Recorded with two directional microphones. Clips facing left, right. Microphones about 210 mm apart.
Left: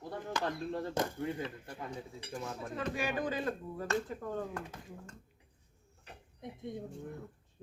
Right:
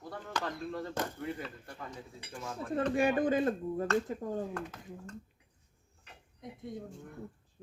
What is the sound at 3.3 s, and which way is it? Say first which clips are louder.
Speech: right 7 dB; 25° right (ahead or behind).